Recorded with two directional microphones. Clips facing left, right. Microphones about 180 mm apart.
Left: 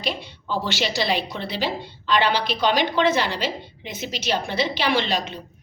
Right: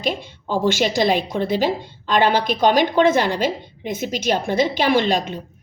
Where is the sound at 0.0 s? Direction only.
45° right (ahead or behind).